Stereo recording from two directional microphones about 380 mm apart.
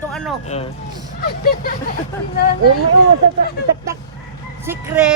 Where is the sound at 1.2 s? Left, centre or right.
Left.